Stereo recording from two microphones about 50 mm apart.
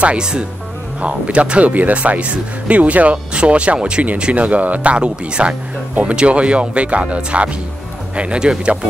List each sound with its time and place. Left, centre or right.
0.0 s speech: centre